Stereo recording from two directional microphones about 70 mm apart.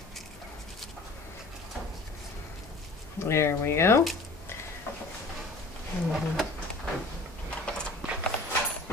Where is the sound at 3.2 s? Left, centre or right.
Left.